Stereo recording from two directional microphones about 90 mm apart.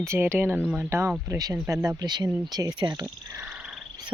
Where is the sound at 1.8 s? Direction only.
50° right (ahead or behind).